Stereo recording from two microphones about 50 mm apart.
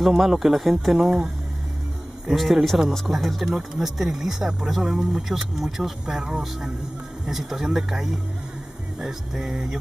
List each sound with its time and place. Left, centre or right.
0.0 s speech: centre
2.3 s speech: centre